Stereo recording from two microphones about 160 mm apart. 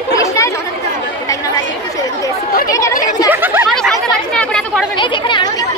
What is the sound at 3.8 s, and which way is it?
Chatter, 5° left (ahead or behind).